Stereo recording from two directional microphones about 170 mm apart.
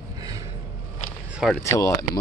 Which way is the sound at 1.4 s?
5° right (ahead or behind).